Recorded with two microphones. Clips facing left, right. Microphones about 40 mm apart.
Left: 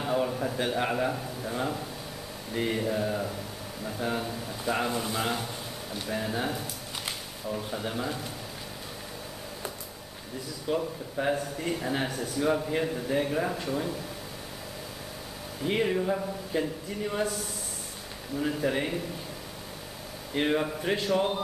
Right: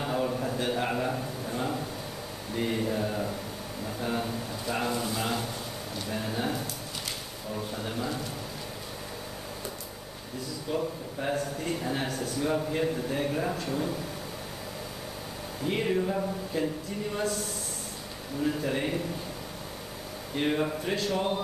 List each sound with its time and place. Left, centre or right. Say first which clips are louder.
0.0 s a sound: left 1 dB; centre
0.7 s speech: left 1 dB; centre
10.7 s speech: left 2 dB; centre
15.6 s speech: left 1 dB; centre
16.5 s speech: left 2 dB; centre
18.6 s speech: left 2 dB; centre
20.3 s speech: left 1 dB; centre
21.1 s speech: left 3 dB; centre